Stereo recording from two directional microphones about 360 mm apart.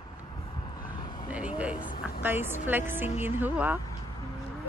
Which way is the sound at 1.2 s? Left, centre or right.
Centre.